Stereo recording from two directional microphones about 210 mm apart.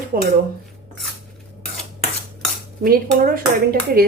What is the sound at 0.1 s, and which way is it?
Speech, 45° right (ahead or behind).